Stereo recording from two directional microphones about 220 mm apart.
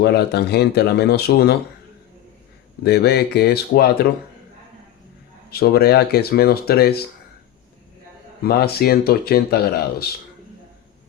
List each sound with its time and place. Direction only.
0.0 s speech: 45° left (ahead or behind)
2.8 s speech: 45° left (ahead or behind)
5.5 s speech: 45° left (ahead or behind)
8.4 s speech: 45° left (ahead or behind)